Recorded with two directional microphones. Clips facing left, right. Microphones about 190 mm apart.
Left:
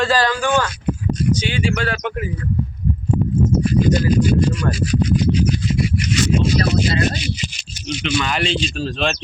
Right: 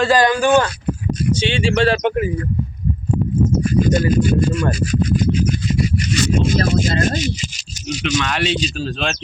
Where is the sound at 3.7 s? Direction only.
45° right (ahead or behind).